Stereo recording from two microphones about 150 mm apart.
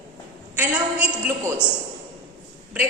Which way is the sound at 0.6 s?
10° right (ahead or behind).